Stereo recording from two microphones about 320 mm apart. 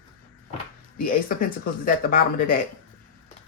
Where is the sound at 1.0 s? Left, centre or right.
Left.